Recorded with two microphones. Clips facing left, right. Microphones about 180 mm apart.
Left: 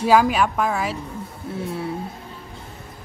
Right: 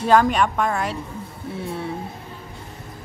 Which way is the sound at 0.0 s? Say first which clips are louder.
Even; 5° left (ahead or behind).